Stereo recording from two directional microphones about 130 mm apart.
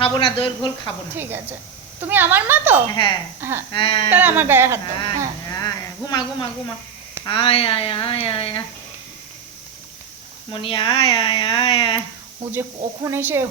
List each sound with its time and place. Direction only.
0.0 s speech: 45° left (ahead or behind)
1.1 s speech: 15° right (ahead or behind)
2.9 s speech: 35° left (ahead or behind)
4.1 s speech: 15° right (ahead or behind)
5.5 s speech: 30° left (ahead or behind)
7.3 s speech: 45° left (ahead or behind)
10.5 s speech: 40° left (ahead or behind)
12.5 s speech: 20° right (ahead or behind)